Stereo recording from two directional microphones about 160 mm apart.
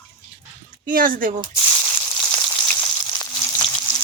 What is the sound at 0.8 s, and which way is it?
Speech, 60° right (ahead or behind).